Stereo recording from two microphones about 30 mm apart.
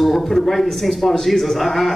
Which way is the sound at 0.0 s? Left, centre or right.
Centre.